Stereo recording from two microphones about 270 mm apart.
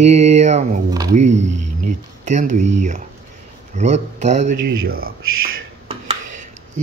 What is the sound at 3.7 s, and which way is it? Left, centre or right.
Speech, right.